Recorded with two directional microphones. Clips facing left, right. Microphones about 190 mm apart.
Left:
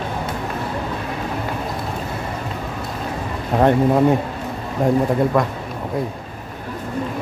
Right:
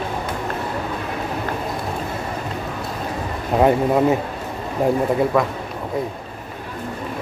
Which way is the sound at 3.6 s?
Centre (ahead or behind).